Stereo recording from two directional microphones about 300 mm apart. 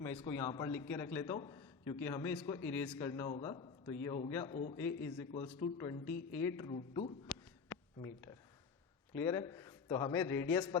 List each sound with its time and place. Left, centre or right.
0.0 s a man's voice: centre
4.5 s a man's voice: left
4.8 s a man's voice: centre
6.1 s speech: left
6.4 s a man's voice: centre
6.7 s a man's voice: left
7.3 s a sound: centre
9.1 s a man's voice: centre